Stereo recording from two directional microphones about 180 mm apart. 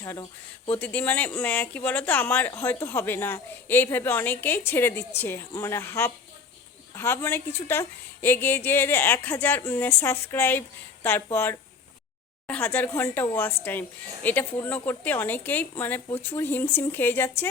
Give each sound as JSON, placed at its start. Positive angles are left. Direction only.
{"t": 0.0, "sound": "speech", "side_deg": 20}
{"t": 0.8, "sound": "speech", "side_deg": 10}